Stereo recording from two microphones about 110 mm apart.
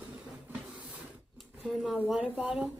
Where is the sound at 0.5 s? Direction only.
15° right (ahead or behind).